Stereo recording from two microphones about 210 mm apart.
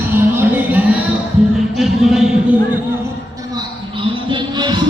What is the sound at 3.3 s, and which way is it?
Music, 20° right (ahead or behind).